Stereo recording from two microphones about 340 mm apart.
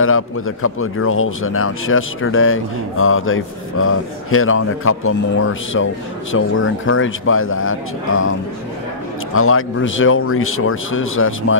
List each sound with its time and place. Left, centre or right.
0.0 s a man's voice: left